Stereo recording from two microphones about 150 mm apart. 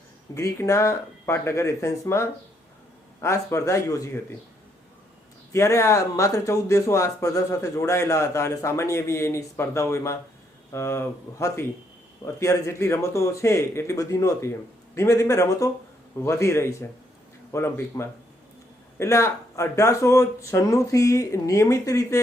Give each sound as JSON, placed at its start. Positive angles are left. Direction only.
{"t": 0.3, "sound": "speech", "side_deg": 20}
{"t": 5.5, "sound": "speech", "side_deg": 20}